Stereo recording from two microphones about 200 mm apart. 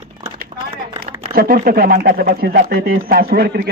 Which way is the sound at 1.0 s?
50° right (ahead or behind).